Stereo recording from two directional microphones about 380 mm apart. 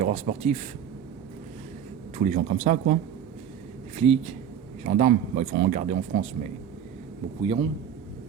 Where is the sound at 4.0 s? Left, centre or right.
Centre.